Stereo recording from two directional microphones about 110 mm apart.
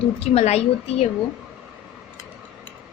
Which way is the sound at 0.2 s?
75° left (ahead or behind).